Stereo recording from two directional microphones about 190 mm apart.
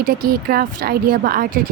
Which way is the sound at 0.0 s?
50° right (ahead or behind).